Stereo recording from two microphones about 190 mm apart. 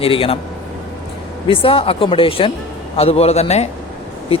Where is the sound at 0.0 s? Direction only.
30° left (ahead or behind).